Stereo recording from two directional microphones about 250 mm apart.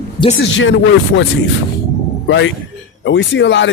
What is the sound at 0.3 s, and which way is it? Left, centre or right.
A man's voice, left.